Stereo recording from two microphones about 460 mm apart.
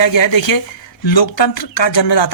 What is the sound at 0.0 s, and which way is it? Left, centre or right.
A woman's voice, left.